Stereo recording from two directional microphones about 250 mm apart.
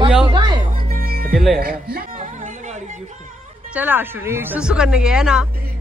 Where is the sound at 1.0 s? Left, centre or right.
Right.